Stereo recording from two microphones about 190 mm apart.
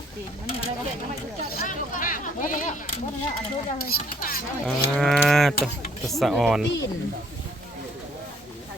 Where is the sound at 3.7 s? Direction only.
50° left (ahead or behind).